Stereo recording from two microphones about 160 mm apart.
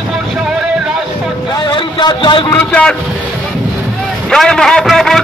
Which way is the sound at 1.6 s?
30° left (ahead or behind).